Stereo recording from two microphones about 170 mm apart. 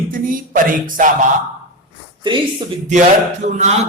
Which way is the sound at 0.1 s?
55° right (ahead or behind).